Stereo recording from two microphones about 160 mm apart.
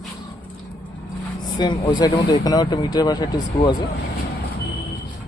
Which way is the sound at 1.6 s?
25° left (ahead or behind).